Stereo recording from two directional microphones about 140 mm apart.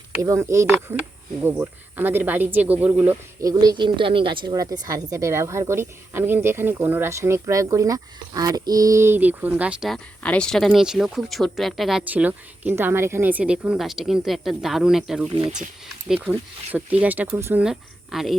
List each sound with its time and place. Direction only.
0.2 s a woman's voice: 20° right (ahead or behind)
3.4 s a woman's voice: 30° right (ahead or behind); by 9.9 s 10° right (ahead or behind)
9.9 s speech: 5° left (ahead or behind)